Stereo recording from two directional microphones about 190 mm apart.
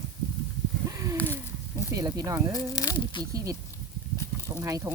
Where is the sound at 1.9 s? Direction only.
20° right (ahead or behind).